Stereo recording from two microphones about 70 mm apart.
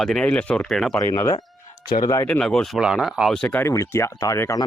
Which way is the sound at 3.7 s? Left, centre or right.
Left.